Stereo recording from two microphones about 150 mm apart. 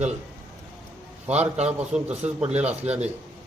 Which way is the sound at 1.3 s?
45° right (ahead or behind).